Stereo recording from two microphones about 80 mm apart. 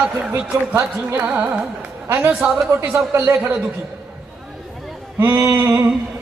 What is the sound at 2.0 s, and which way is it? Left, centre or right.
A man's voice, right.